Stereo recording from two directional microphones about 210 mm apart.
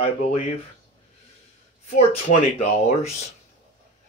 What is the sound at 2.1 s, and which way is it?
Speech, 30° left (ahead or behind).